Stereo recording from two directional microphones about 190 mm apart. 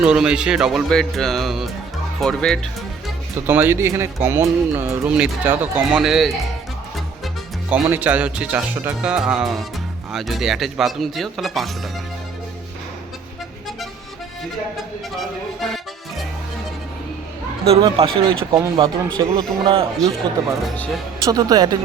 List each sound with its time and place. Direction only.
0.0 s speech: 5° right (ahead or behind)
3.4 s speech: 10° right (ahead or behind)
7.7 s speech: 10° right (ahead or behind)
15.6 s music: centre (ahead or behind)
17.7 s speech: 25° right (ahead or behind)
20.7 s speech: 5° left (ahead or behind)
21.2 s speech: 20° right (ahead or behind)